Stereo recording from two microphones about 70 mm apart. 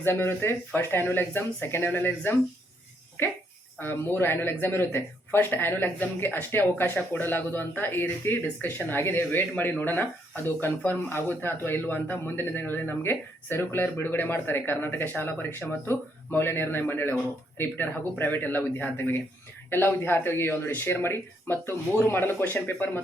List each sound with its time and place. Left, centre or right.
0.0 s speech: left